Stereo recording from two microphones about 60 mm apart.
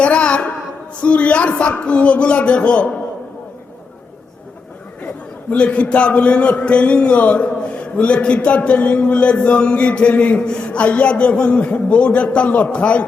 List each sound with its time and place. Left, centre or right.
0.0 s a woman's voice: centre
5.5 s a man's voice: left